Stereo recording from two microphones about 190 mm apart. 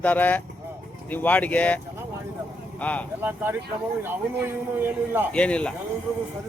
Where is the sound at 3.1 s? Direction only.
10° right (ahead or behind).